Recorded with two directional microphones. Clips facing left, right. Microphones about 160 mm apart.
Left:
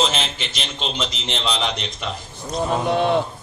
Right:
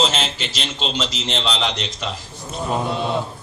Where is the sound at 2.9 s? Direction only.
55° left (ahead or behind).